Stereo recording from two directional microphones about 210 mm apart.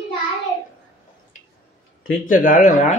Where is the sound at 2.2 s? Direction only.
40° left (ahead or behind).